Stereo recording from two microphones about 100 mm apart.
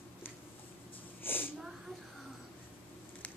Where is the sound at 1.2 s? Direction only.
20° left (ahead or behind).